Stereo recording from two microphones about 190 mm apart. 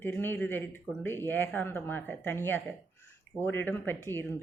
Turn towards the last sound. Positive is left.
turn(degrees=10)  # may be behind; listen again after turning